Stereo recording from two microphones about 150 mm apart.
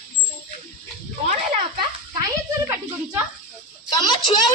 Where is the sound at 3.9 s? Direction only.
30° left (ahead or behind).